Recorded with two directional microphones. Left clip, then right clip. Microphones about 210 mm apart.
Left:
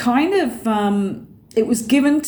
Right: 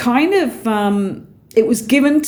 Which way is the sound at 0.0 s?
50° right (ahead or behind).